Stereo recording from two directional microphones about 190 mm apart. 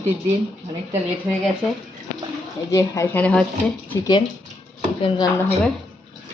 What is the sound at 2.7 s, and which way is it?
Speech, 15° left (ahead or behind).